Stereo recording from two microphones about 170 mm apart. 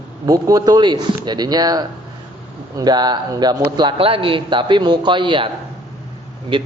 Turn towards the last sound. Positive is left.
turn(degrees=-30)  # may be behind; listen again after turning